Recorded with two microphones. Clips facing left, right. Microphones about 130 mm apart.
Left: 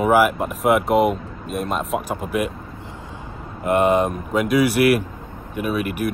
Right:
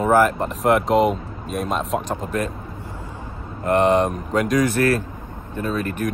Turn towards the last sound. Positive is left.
turn(degrees=10)  # may be behind; listen again after turning